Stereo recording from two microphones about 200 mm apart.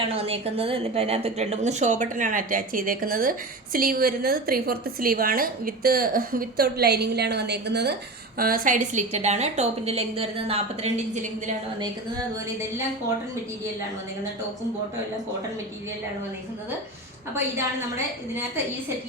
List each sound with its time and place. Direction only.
0.1 s a woman's voice: 30° right (ahead or behind); by 7.9 s 55° right (ahead or behind)
8.4 s a woman's voice: 45° right (ahead or behind)